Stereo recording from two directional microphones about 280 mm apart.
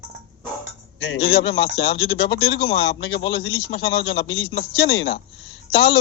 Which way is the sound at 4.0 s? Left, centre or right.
Left.